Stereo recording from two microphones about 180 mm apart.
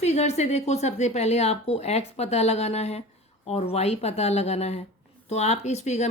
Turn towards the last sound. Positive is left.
turn(degrees=40)  # may be behind; listen again after turning